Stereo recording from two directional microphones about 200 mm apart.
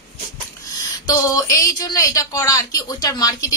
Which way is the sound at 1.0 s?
15° left (ahead or behind).